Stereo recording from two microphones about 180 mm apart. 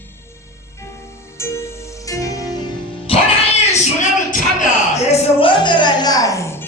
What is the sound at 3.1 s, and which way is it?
Music, 30° left (ahead or behind).